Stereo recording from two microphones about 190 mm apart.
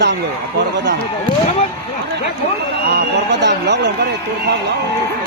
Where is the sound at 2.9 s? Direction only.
65° right (ahead or behind).